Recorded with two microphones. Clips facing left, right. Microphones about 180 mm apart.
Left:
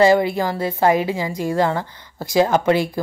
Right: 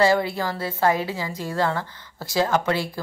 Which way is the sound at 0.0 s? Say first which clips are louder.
Left 5 dB; 15° left (ahead or behind).